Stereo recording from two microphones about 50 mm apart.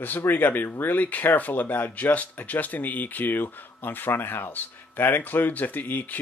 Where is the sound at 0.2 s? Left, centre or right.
Left.